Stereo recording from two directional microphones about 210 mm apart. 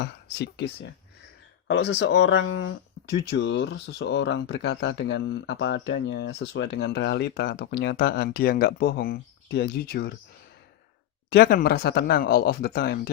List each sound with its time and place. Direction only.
0.0 s speech: 50° left (ahead or behind)
11.3 s speech: 45° left (ahead or behind)